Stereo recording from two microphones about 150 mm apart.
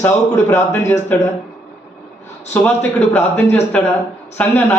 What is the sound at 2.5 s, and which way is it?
A man's voice, 10° left (ahead or behind).